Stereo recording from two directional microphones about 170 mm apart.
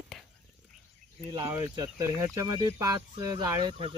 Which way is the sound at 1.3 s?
20° right (ahead or behind).